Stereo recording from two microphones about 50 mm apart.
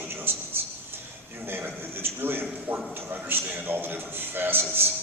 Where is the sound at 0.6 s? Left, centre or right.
Right.